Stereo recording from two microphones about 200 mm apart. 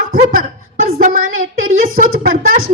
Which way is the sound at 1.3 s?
80° right.